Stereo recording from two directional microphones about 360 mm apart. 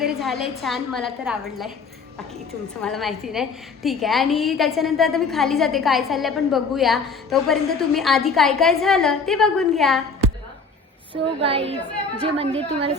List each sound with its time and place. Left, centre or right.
0.0 s a woman's voice: centre
2.8 s a woman's voice: centre
11.4 s a woman's voice: centre